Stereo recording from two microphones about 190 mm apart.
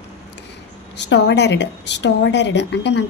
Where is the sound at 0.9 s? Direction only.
65° left (ahead or behind).